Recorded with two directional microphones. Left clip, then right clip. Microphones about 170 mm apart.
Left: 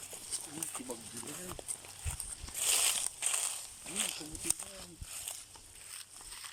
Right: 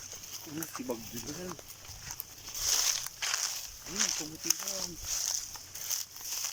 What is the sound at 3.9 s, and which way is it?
Speech, 10° left (ahead or behind).